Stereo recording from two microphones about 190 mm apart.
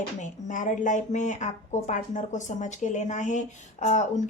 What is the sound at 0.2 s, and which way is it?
Speech, 40° left (ahead or behind).